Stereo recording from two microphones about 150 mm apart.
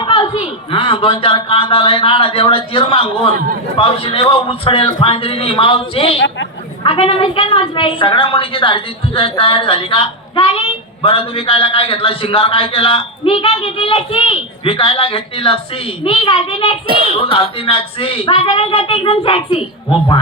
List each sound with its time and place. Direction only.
0.0 s a sound: 35° left (ahead or behind)
0.7 s a woman's voice: 35° left (ahead or behind)
16.8 s speech: 35° right (ahead or behind)
17.1 s a woman's voice: 40° left (ahead or behind)